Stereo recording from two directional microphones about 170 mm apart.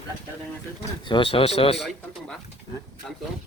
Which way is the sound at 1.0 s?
30° left (ahead or behind).